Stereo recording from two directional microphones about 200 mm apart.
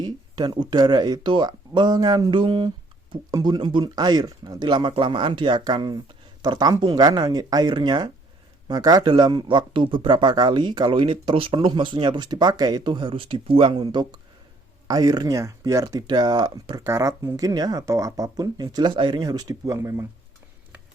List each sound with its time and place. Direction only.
0.0 s speech: 20° right (ahead or behind)